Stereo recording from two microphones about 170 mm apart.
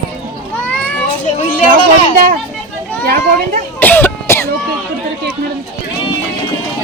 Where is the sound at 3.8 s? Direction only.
10° left (ahead or behind).